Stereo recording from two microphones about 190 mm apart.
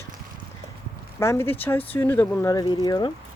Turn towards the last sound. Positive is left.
turn(degrees=20)  # may be behind; listen again after turning